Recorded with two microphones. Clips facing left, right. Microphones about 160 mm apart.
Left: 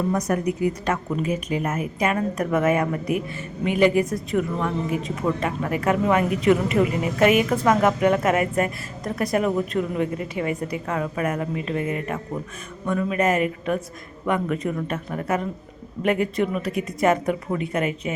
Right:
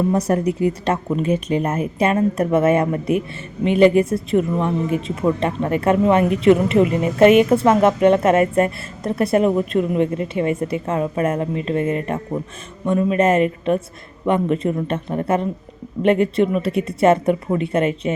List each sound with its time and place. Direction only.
0.1 s a woman's voice: 30° right (ahead or behind)